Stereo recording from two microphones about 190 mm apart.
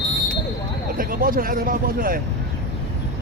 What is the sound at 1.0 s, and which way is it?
Speech, 50° right (ahead or behind).